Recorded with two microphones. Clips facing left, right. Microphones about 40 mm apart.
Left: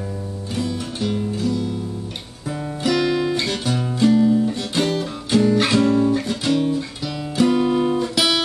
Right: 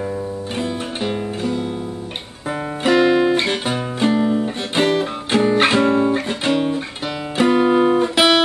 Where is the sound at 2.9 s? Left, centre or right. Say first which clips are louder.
Right 5 dB; right.